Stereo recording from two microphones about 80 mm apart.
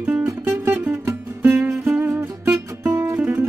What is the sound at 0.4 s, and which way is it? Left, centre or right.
Music, right.